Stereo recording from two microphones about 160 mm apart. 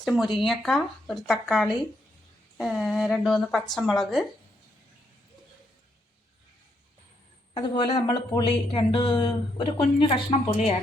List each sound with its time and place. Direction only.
0.0 s speech: centre (ahead or behind)
7.5 s a woman's voice: 25° left (ahead or behind)